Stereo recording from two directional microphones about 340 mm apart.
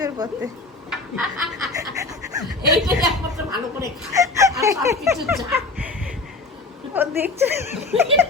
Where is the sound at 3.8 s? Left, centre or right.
Centre.